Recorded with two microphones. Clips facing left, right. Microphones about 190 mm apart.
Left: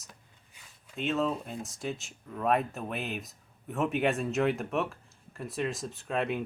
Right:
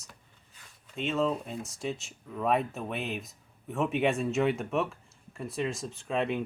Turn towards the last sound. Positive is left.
turn(degrees=0)  # may be behind; listen again after turning